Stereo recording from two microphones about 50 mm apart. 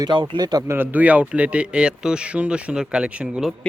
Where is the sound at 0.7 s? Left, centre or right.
Right.